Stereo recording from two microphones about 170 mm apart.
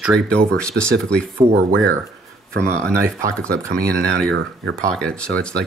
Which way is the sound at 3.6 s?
80° right.